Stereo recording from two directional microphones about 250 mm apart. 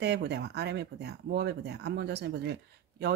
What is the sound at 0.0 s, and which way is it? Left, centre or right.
Speech, right.